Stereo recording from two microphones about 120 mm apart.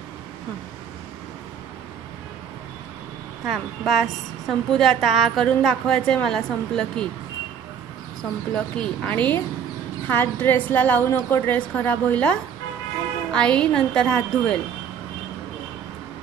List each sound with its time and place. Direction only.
3.4 s a woman's voice: centre (ahead or behind)
8.5 s a woman's voice: 10° left (ahead or behind)